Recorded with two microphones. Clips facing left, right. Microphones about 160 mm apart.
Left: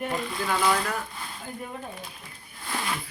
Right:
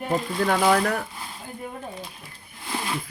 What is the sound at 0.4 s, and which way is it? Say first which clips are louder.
Speech: right 5 dB; 50° right (ahead or behind).